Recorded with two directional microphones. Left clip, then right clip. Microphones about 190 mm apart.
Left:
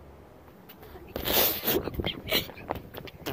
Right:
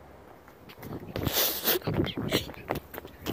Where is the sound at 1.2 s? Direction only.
35° left (ahead or behind).